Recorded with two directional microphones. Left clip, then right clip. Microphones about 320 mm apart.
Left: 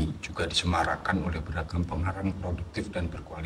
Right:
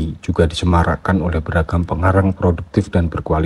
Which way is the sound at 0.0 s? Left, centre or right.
Centre.